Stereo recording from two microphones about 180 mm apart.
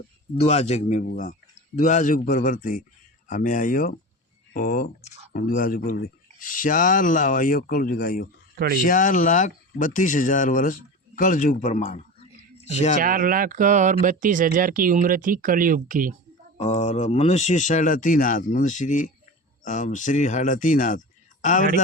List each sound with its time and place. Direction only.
0.3 s speech: 35° left (ahead or behind)
13.0 s speech: 50° right (ahead or behind)
16.6 s speech: 40° left (ahead or behind)